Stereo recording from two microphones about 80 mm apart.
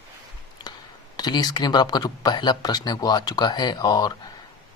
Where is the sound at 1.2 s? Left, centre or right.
Left.